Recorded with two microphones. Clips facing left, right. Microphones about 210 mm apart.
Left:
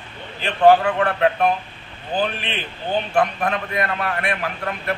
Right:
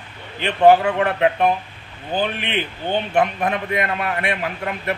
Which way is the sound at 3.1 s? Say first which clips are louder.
Right 1 dB; 20° right (ahead or behind).